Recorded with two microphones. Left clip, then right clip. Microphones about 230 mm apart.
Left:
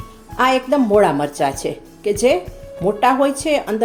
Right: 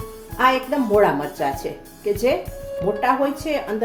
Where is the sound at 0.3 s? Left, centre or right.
Left.